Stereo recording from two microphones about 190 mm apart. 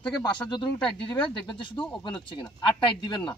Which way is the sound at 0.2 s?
20° left (ahead or behind).